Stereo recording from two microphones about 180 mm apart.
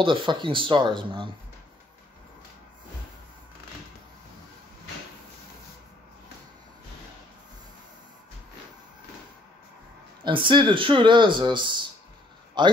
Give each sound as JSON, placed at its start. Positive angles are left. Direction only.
{"t": 0.0, "sound": "speech", "side_deg": -25}
{"t": 10.2, "sound": "speech", "side_deg": -25}